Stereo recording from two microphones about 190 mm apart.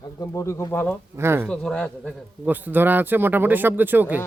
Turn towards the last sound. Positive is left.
turn(degrees=-10)  # may be behind; listen again after turning